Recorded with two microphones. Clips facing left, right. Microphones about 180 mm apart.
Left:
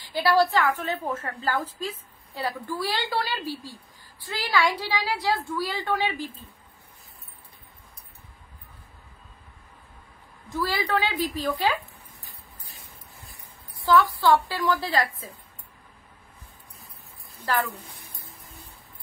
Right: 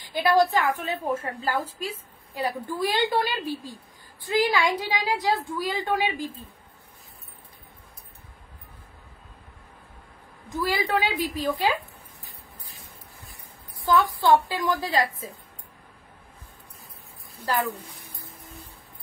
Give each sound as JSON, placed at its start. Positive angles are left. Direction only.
{"t": 0.1, "sound": "a woman's voice", "side_deg": -20}
{"t": 10.5, "sound": "a woman's voice", "side_deg": -15}
{"t": 14.2, "sound": "a woman's voice", "side_deg": -20}
{"t": 17.5, "sound": "a sound", "side_deg": -10}